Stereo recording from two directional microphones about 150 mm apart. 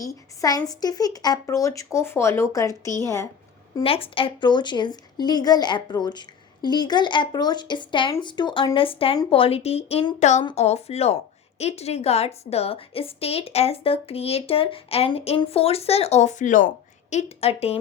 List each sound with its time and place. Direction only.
0.0 s a woman's voice: 25° left (ahead or behind)
3.8 s a woman's voice: 40° left (ahead or behind)